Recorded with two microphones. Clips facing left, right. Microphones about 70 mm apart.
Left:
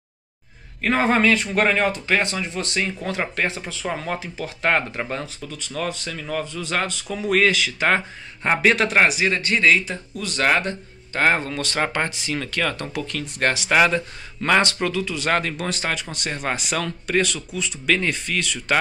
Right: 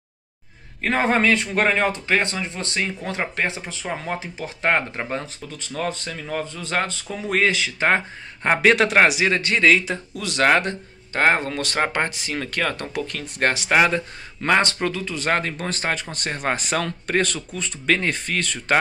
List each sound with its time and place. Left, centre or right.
0.8 s speech: right
8.5 s a man's voice: right
11.1 s speech: right
12.4 s speech: right
13.7 s speech: right